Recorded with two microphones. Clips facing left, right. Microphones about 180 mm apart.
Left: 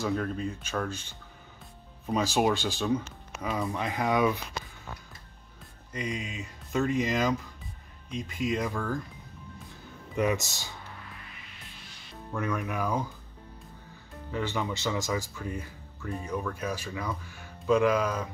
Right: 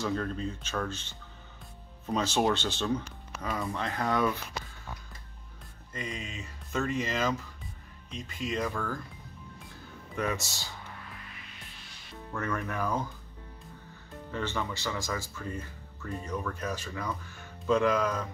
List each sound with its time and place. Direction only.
0.0 s speech: 5° left (ahead or behind)
5.9 s speech: 15° left (ahead or behind)
10.1 s speech: 15° left (ahead or behind)
12.3 s speech: 15° left (ahead or behind)
14.3 s speech: 15° left (ahead or behind)